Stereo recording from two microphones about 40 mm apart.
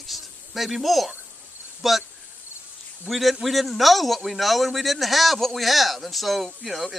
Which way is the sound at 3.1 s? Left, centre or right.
Centre.